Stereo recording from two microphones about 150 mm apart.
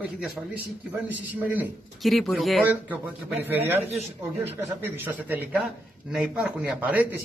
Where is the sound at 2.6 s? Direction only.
10° right (ahead or behind).